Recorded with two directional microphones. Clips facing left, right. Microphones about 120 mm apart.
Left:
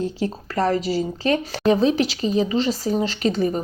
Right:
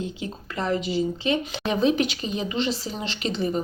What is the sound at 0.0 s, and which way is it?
Speech, 40° left (ahead or behind).